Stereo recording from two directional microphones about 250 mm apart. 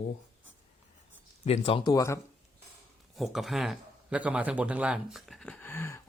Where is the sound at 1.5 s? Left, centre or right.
Left.